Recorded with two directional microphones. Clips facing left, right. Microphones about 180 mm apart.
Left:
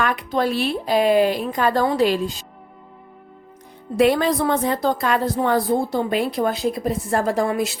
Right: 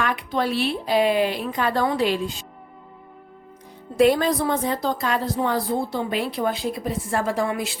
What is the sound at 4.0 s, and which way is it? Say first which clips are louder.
A woman's voice: left 1 dB; 60° left (ahead or behind).